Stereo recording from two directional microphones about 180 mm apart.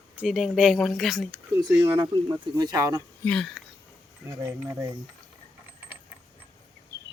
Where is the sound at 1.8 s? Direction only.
20° right (ahead or behind).